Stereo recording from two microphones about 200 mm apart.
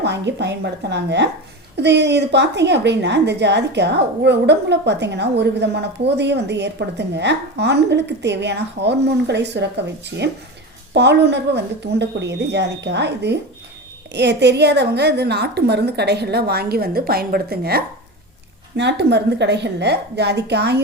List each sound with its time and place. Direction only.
0.0 s a woman's voice: 60° right (ahead or behind)